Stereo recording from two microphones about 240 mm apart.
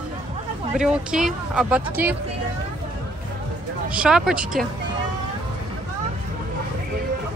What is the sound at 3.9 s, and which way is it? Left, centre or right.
Speech, centre.